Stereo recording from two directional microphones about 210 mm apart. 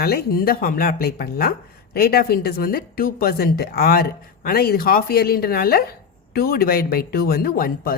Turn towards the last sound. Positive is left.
turn(degrees=45)  # may be behind; listen again after turning